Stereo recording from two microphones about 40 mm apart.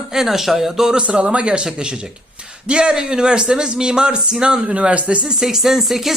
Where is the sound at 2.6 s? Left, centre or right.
Right.